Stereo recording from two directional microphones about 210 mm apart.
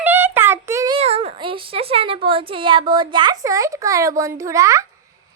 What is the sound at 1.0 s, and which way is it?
A woman's voice, 30° right (ahead or behind).